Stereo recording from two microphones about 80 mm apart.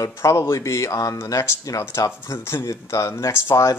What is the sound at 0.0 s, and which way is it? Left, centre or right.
Speech, left.